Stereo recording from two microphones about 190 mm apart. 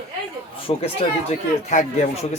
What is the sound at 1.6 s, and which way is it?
Speech, 40° left (ahead or behind).